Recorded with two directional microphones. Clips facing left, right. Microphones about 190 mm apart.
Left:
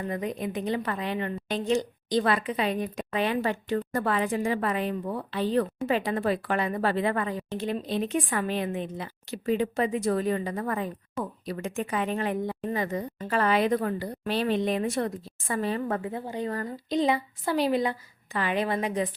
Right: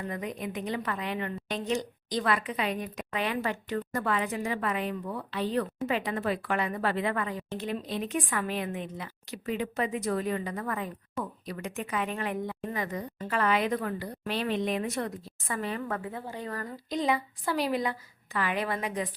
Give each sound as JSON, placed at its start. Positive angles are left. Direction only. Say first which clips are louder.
{"t": 0.1, "sound": "a woman's voice", "louder": "left 4 dB", "side_deg": 30}